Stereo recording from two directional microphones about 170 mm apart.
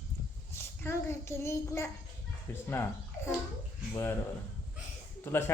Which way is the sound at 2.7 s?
15° left (ahead or behind).